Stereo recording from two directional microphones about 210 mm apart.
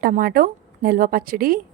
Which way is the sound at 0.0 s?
40° right (ahead or behind).